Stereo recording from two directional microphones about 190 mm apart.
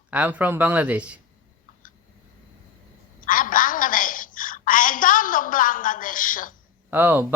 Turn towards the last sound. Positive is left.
turn(degrees=-10)  # may be behind; listen again after turning